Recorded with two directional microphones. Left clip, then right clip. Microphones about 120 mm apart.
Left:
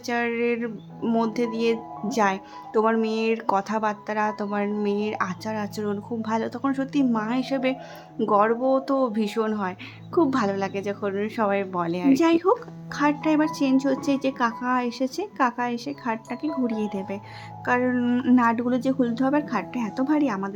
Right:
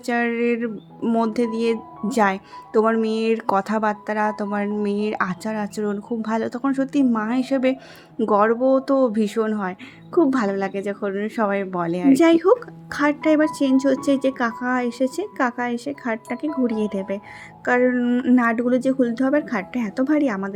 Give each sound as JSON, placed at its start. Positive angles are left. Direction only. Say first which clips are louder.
{"t": 0.0, "sound": "a woman's voice", "louder": "right 3 dB", "side_deg": -35}
{"t": 18.0, "sound": "speech", "louder": "right 3 dB", "side_deg": -10}
{"t": 18.3, "sound": "a woman's voice", "louder": "right 2 dB", "side_deg": -25}